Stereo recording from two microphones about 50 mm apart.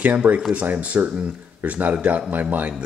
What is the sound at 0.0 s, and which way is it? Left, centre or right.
Speech, right.